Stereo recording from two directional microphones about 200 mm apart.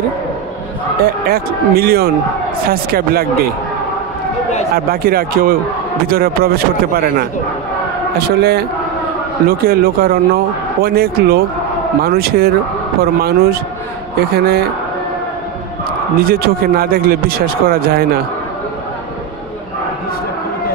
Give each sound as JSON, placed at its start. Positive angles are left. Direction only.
{"t": 1.2, "sound": "a man's voice", "side_deg": -50}
{"t": 4.7, "sound": "a man's voice", "side_deg": -50}
{"t": 16.2, "sound": "a man's voice", "side_deg": -50}